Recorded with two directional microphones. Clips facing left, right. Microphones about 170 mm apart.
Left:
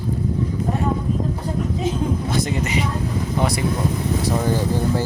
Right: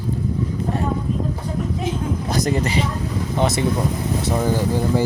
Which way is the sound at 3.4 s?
25° right (ahead or behind).